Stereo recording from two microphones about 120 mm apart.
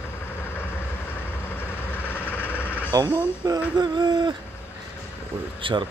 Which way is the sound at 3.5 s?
35° right (ahead or behind).